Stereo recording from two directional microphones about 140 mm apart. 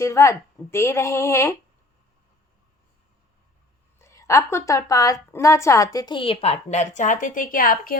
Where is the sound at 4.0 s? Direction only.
20° left (ahead or behind).